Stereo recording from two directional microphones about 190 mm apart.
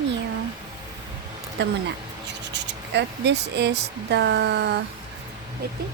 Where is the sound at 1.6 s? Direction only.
65° right (ahead or behind).